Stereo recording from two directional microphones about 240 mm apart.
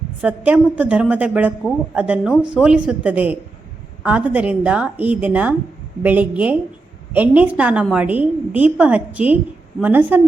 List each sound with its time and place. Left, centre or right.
0.2 s a woman's voice: centre